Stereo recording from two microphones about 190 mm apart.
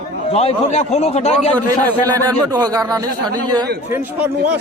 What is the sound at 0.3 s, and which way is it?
A man's voice, 30° left (ahead or behind).